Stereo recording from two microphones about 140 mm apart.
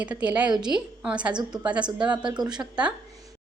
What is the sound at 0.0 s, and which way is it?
A woman's voice, 10° right (ahead or behind).